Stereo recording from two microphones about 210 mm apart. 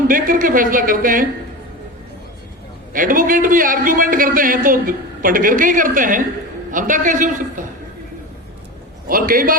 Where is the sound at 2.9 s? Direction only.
40° right (ahead or behind).